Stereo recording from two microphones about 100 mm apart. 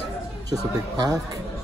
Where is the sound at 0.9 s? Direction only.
40° right (ahead or behind).